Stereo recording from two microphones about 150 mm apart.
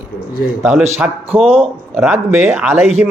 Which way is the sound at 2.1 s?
15° right (ahead or behind).